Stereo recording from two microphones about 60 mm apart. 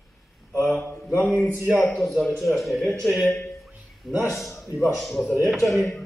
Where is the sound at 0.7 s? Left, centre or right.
Left.